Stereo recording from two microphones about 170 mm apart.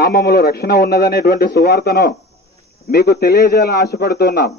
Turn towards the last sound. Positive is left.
turn(degrees=70)  # may be behind; listen again after turning